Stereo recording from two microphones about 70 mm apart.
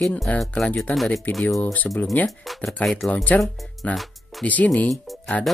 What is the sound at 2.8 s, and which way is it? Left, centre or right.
Speech, left.